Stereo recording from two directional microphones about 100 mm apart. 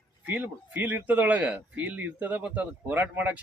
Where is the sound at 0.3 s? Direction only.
20° right (ahead or behind).